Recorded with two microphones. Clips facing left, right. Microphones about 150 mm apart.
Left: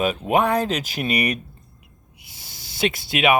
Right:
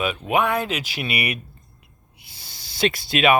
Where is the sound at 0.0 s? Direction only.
40° left (ahead or behind).